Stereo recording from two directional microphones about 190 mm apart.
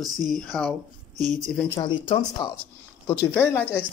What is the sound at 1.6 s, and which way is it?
Speech, 20° left (ahead or behind).